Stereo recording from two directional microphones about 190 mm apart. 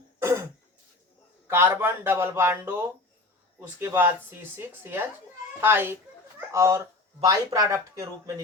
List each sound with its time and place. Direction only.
0.2 s throat clearing: 15° right (ahead or behind)
1.5 s speech: 15° right (ahead or behind)